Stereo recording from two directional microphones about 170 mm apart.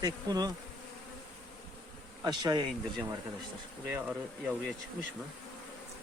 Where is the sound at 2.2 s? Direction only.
25° right (ahead or behind).